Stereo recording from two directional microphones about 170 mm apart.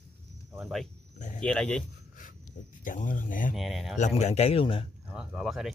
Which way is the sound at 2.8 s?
50° left (ahead or behind).